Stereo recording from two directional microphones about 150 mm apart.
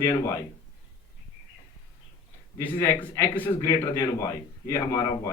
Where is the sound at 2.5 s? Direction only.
20° left (ahead or behind).